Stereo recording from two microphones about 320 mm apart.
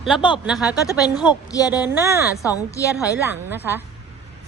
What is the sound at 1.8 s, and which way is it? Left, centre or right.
Speech, centre.